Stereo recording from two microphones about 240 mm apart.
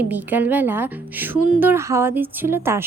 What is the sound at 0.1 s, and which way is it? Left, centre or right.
A woman's voice, centre.